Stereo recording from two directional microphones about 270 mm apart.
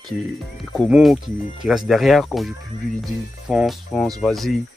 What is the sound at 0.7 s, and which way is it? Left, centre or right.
Speech, centre.